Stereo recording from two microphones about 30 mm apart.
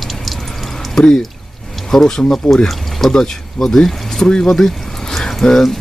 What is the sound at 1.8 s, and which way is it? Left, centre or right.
Speech, centre.